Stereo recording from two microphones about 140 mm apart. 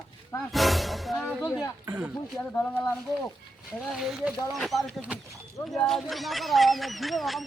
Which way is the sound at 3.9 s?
Centre (ahead or behind).